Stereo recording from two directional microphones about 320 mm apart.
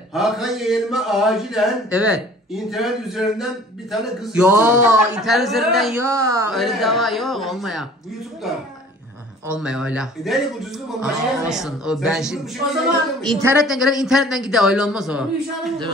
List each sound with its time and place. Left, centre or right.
0.1 s speech: centre
9.6 s speech: centre